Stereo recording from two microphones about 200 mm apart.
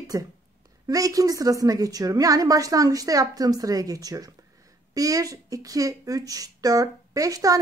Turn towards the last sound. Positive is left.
turn(degrees=-15)  # may be behind; listen again after turning